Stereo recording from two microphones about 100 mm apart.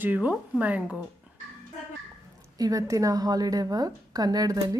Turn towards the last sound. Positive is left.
turn(degrees=-40)  # may be behind; listen again after turning